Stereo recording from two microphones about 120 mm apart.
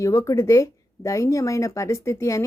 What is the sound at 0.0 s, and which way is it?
Speech, 25° left (ahead or behind).